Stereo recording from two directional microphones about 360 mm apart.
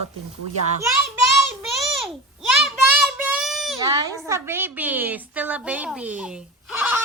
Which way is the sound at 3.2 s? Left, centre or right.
Centre.